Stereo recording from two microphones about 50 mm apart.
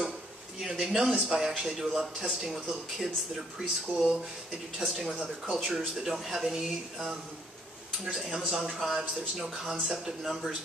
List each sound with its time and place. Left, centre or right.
0.6 s speech: centre
3.9 s speech: centre
4.8 s speech: centre
8.5 s speech: centre